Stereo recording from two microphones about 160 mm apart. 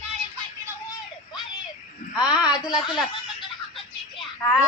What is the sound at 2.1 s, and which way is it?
Speech, 5° right (ahead or behind).